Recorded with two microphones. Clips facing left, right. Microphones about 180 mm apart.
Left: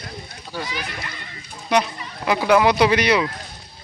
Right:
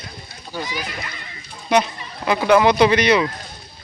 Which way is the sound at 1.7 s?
5° left (ahead or behind).